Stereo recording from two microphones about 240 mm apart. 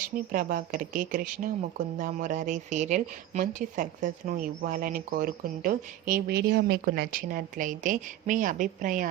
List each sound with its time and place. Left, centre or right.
0.3 s a woman's voice: right